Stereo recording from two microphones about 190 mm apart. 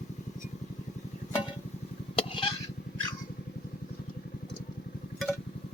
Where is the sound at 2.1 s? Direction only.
25° left (ahead or behind).